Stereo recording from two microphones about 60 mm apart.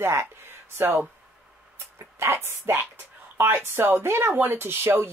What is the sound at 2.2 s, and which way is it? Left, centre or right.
Speech, right.